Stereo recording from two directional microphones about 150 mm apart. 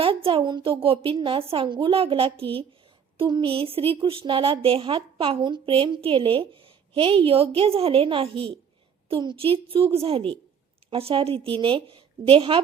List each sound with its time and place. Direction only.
0.0 s a woman's voice: 35° right (ahead or behind)